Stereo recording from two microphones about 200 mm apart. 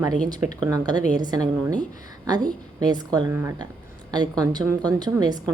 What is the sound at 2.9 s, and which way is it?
Speech, 20° right (ahead or behind).